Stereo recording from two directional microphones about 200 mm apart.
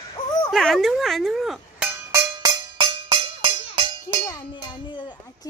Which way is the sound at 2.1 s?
20° right (ahead or behind).